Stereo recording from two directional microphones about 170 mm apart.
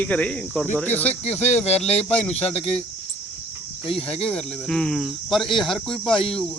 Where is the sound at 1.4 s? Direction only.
40° left (ahead or behind).